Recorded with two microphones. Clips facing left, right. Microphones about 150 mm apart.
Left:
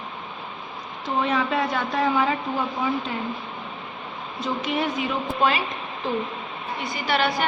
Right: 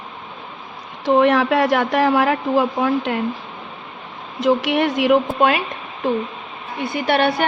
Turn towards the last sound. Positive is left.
turn(degrees=-60)  # may be behind; listen again after turning